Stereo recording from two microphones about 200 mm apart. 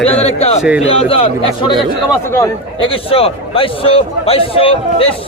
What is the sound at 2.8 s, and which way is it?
A man's voice, 30° left (ahead or behind).